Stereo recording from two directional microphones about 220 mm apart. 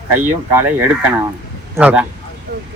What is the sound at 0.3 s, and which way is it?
Speech, 10° right (ahead or behind).